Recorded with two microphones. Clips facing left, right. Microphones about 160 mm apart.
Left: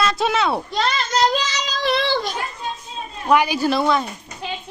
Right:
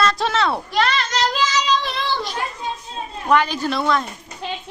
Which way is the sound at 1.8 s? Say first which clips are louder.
Left 5 dB; 75° left (ahead or behind).